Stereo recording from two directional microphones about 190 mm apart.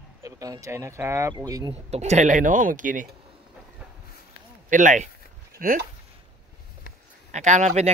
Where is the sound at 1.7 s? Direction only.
35° right (ahead or behind).